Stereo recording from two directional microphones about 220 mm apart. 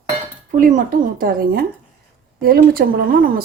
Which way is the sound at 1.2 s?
40° right (ahead or behind).